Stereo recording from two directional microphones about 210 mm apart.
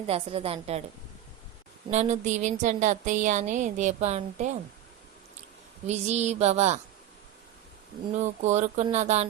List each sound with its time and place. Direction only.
0.1 s a woman's voice: 25° right (ahead or behind)
1.9 s speech: 35° right (ahead or behind)
5.8 s speech: 30° right (ahead or behind)
8.1 s speech: 35° right (ahead or behind)